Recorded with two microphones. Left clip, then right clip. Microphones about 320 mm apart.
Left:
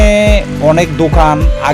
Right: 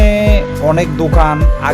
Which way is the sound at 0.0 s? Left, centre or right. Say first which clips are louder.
Left 4 dB; right.